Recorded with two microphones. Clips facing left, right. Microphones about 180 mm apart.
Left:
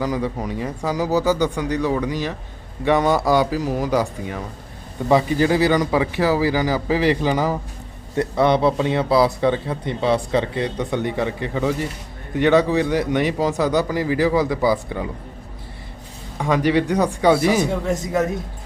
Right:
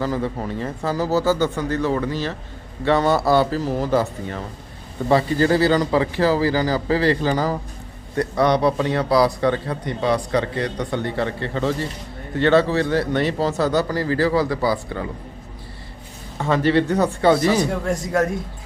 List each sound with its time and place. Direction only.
0.0 s speech: 15° left (ahead or behind)
16.4 s speech: 15° left (ahead or behind)